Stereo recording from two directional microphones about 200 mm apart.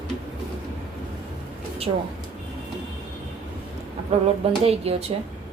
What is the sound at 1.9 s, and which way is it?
Speech, 25° right (ahead or behind).